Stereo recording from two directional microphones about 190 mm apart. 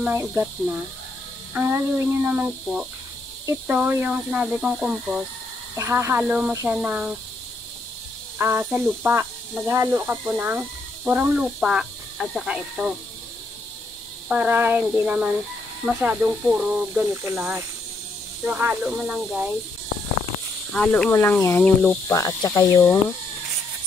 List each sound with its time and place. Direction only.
0.0 s speech: 15° right (ahead or behind)
8.4 s speech: 10° right (ahead or behind)
14.3 s speech: 10° right (ahead or behind)
20.7 s speech: 5° left (ahead or behind)